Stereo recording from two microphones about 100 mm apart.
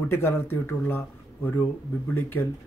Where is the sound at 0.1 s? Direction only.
25° left (ahead or behind).